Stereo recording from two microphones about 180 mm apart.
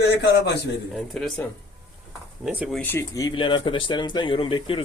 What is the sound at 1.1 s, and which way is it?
Speech, 5° left (ahead or behind).